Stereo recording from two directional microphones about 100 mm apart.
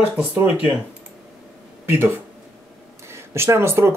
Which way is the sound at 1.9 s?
20° right (ahead or behind).